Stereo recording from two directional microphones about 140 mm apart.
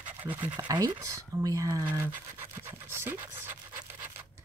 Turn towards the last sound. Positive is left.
turn(degrees=-15)  # may be behind; listen again after turning